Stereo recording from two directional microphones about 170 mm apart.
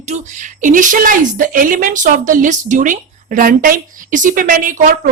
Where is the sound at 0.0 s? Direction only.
45° right (ahead or behind).